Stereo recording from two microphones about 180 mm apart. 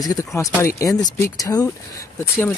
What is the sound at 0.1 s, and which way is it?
Speech, 20° left (ahead or behind).